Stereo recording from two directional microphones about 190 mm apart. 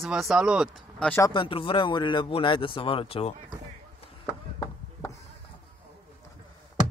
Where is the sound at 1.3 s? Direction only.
25° left (ahead or behind).